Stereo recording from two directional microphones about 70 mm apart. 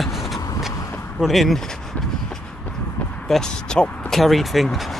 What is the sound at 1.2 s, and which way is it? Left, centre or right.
Speech, centre.